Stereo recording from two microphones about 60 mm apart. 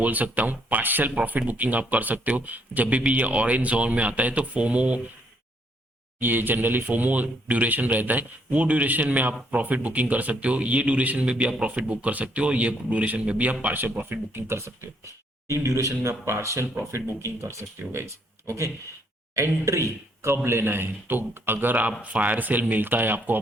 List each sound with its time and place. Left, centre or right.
0.0 s speech: right
6.1 s speech: right
14.4 s speech: right